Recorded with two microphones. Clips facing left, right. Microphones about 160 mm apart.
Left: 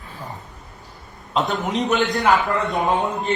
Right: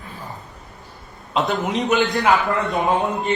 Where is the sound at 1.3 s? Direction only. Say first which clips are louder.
Right 1 dB; centre (ahead or behind).